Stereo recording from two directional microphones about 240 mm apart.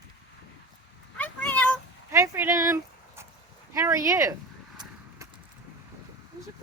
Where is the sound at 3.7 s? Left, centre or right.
Centre.